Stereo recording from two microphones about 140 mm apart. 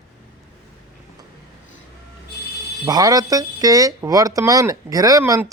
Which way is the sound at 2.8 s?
25° right (ahead or behind).